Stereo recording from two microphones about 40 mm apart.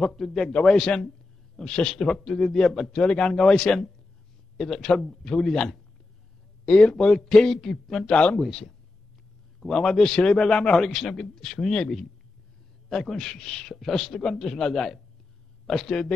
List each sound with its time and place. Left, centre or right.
0.0 s a man's voice: centre
0.4 s a man's voice: centre
0.8 s a man's voice: centre
3.0 s a man's voice: left; by 8.0 s centre
8.1 s speech: left
8.4 s a man's voice: centre
10.9 s a man's voice: centre
12.9 s a man's voice: centre